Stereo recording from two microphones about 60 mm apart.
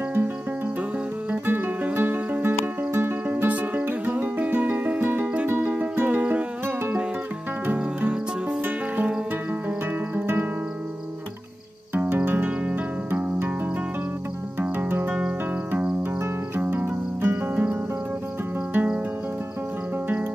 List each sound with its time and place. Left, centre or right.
1.3 s music: right
7.7 s music: right
11.9 s music: right
14.6 s music: right
16.5 s cricket: right